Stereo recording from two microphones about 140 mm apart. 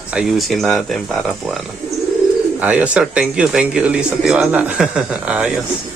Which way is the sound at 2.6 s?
10° right (ahead or behind).